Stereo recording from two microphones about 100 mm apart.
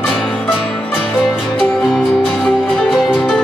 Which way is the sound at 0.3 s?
15° left (ahead or behind).